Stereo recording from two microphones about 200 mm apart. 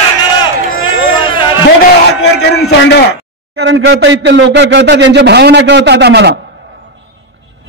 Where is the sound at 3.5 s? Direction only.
65° right (ahead or behind).